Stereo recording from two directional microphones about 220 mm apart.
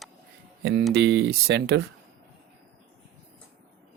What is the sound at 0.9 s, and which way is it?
Speech, 55° right (ahead or behind).